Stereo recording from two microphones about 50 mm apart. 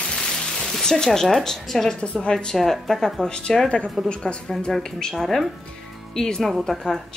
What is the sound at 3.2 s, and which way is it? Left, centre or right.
Speech, centre.